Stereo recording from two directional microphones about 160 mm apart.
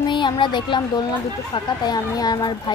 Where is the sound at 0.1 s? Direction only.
30° left (ahead or behind).